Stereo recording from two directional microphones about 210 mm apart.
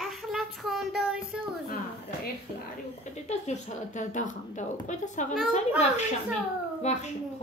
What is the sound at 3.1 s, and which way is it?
A woman's voice, 35° left (ahead or behind).